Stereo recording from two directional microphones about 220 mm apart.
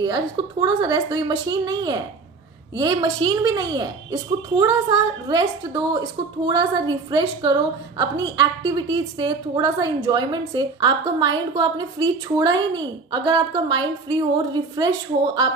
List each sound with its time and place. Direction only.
0.0 s a woman's voice: 20° right (ahead or behind)